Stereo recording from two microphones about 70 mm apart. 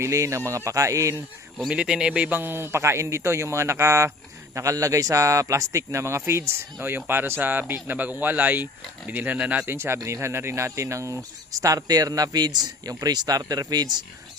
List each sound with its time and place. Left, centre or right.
0.0 s a man's voice: right
1.7 s a man's voice: centre; by 6.5 s right
6.7 s speech: right
9.6 s speech: right